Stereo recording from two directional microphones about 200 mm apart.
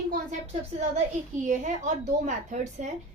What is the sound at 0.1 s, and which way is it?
A woman's voice, 35° right (ahead or behind).